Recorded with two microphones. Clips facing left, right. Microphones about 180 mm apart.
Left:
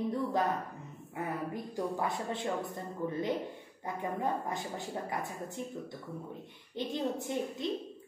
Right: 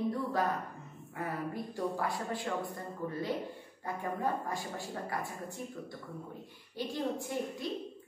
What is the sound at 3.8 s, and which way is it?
A woman's voice, 20° left (ahead or behind).